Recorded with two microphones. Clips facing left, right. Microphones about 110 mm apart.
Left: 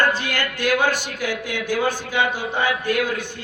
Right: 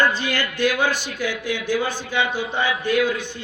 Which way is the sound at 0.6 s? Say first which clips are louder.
Left 1 dB; 15° left (ahead or behind).